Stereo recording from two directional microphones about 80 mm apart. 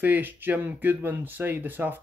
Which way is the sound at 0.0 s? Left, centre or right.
Right.